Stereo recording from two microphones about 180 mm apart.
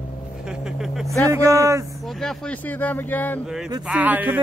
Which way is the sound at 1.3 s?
15° right (ahead or behind).